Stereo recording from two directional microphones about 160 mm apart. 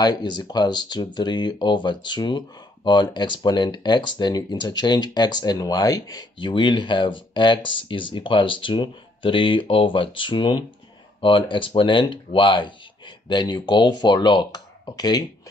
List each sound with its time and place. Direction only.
0.0 s speech: 25° left (ahead or behind)